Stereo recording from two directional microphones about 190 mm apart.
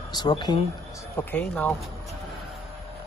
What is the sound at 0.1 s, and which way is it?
Speech, 25° left (ahead or behind).